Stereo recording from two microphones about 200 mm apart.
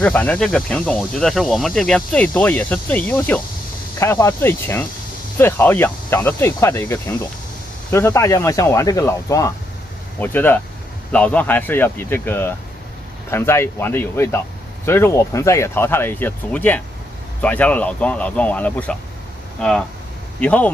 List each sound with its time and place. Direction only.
0.0 s speech: 5° left (ahead or behind)
20.3 s speech: 5° left (ahead or behind)